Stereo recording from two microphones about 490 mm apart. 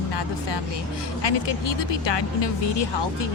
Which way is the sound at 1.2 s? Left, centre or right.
Left.